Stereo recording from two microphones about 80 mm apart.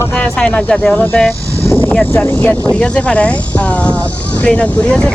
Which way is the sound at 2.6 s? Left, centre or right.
Centre.